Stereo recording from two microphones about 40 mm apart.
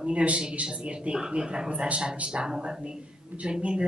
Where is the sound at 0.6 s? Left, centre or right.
Centre.